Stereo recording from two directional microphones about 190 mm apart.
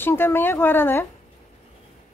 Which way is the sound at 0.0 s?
10° left (ahead or behind).